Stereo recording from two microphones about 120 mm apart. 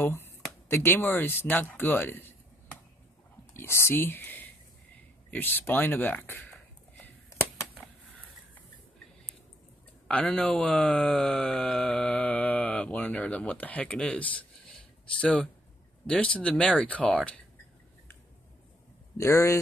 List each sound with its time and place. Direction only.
0.0 s speech: 20° left (ahead or behind)
10.0 s a man's voice: 10° left (ahead or behind)
19.1 s speech: 25° left (ahead or behind)